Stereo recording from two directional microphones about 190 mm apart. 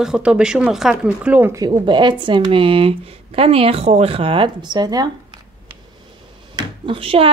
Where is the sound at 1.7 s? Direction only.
25° right (ahead or behind).